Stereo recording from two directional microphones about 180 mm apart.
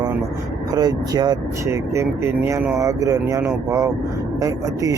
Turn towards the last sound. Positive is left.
turn(degrees=-20)  # may be behind; listen again after turning